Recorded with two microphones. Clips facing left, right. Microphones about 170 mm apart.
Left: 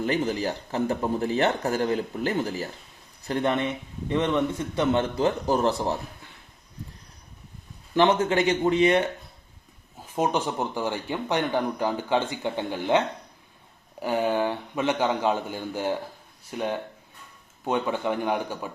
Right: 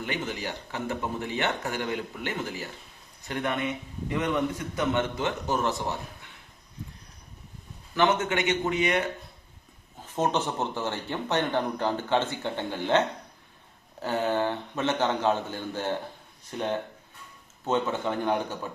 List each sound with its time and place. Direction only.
0.0 s speech: 35° left (ahead or behind)
4.8 s speech: 30° left (ahead or behind)
7.9 s speech: 30° left (ahead or behind)
10.2 s speech: 10° left (ahead or behind)
14.0 s speech: 15° left (ahead or behind)